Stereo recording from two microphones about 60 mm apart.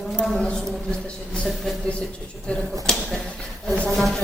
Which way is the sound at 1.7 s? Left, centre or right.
Centre.